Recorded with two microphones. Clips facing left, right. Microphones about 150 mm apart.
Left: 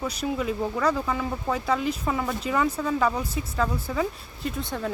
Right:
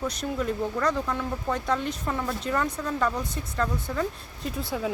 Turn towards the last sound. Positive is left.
turn(degrees=-5)  # may be behind; listen again after turning